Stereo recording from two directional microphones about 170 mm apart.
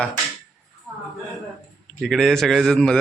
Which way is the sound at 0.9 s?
5° left (ahead or behind).